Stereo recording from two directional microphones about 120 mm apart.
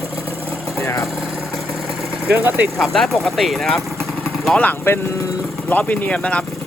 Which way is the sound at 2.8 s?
Centre (ahead or behind).